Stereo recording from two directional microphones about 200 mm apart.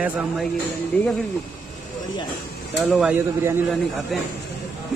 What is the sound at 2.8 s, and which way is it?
Speech, 5° right (ahead or behind).